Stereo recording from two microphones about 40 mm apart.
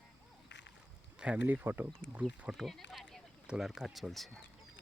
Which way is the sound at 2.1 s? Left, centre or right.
Right.